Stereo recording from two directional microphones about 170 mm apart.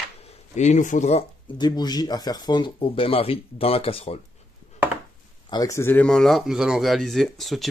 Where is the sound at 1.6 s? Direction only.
25° left (ahead or behind).